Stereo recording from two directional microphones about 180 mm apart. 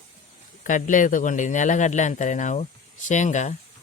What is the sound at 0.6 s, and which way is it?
Speech, 45° left (ahead or behind).